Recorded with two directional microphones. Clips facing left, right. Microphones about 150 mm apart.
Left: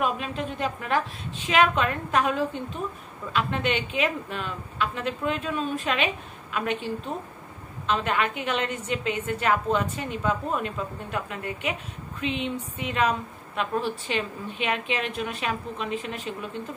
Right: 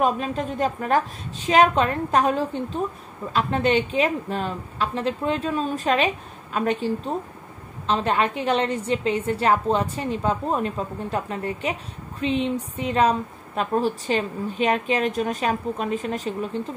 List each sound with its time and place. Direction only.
0.0 s a woman's voice: 40° right (ahead or behind)